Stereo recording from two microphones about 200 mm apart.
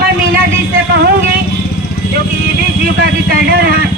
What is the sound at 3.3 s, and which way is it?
Speech, 50° right (ahead or behind).